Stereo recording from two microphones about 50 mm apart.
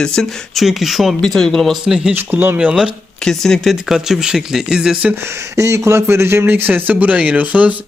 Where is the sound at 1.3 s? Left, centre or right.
Centre.